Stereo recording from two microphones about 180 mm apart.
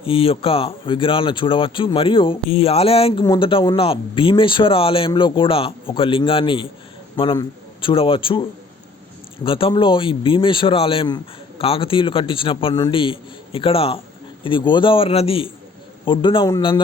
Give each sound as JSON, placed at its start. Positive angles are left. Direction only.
{"t": 0.0, "sound": "speech", "side_deg": 30}